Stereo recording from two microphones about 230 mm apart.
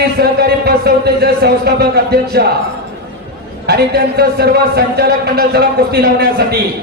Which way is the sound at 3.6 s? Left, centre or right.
Right.